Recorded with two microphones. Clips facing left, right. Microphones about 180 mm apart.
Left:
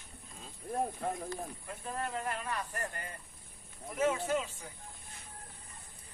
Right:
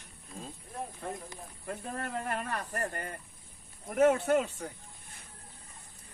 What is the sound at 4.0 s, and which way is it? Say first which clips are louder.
Speech: right 7 dB; 65° right (ahead or behind).